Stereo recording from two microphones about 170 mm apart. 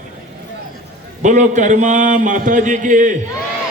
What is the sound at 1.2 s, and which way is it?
A man's voice, 45° right (ahead or behind).